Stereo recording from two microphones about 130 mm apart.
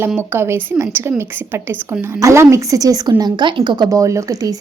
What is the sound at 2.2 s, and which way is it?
Speech, 20° right (ahead or behind).